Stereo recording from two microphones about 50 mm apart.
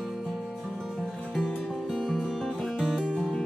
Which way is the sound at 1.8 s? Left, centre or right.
Centre.